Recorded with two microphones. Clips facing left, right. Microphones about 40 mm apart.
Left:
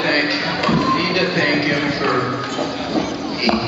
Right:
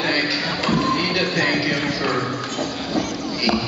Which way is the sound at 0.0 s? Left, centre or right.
Centre.